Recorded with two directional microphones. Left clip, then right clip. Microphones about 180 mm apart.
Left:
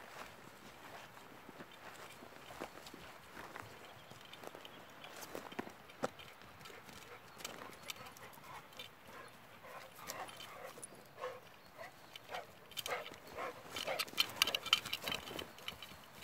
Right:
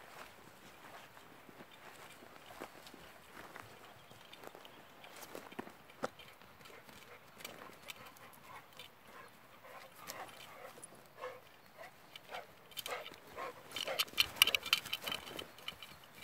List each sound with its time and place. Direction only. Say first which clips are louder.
5.1 s walk: left 2 dB; 5° left (ahead or behind)
7.4 s clip-clop: left 2 dB; 15° left (ahead or behind)
9.8 s dog: left 1 dB; centre (ahead or behind)
13.4 s dog: right 1 dB; 20° right (ahead or behind)
14.1 s a sound: right 5 dB; 30° right (ahead or behind)
14.9 s a sound: even; 5° right (ahead or behind)